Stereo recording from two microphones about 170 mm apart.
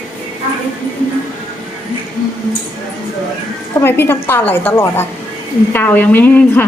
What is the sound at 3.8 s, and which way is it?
A woman's voice, 15° left (ahead or behind).